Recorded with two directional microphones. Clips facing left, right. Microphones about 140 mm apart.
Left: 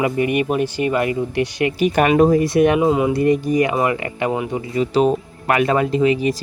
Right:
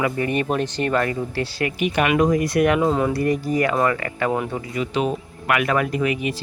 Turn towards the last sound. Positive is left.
turn(degrees=35)  # may be behind; listen again after turning